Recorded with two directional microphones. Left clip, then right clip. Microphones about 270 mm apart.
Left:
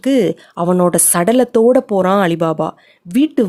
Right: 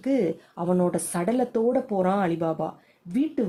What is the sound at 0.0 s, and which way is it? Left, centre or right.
A woman's voice, left.